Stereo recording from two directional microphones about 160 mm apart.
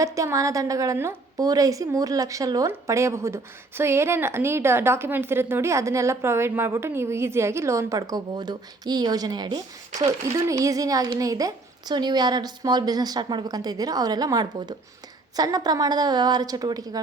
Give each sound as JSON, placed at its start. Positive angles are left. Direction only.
{"t": 0.0, "sound": "a woman's voice", "side_deg": -20}